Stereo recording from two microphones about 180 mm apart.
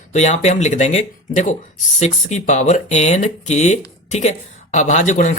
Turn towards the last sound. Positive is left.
turn(degrees=45)  # may be behind; listen again after turning